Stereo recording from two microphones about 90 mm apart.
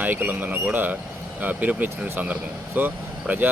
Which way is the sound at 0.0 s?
20° right (ahead or behind).